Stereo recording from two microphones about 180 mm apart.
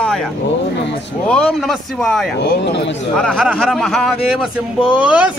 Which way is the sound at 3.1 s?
Centre (ahead or behind).